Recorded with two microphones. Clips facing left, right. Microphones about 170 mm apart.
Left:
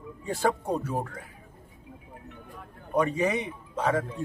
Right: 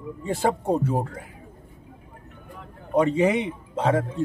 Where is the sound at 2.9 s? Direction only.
25° right (ahead or behind).